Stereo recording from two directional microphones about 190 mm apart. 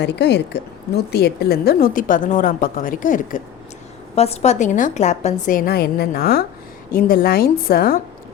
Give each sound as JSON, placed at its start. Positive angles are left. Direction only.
{"t": 0.0, "sound": "a woman's voice", "side_deg": 65}
{"t": 4.1, "sound": "a woman's voice", "side_deg": 35}